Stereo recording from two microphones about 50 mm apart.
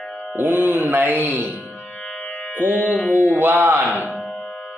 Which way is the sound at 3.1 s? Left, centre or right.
Left.